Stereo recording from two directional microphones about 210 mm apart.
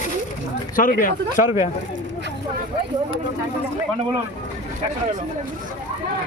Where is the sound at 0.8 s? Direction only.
40° left (ahead or behind).